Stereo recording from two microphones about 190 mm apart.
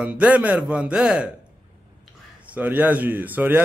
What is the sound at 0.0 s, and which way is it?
A man's voice, 5° right (ahead or behind).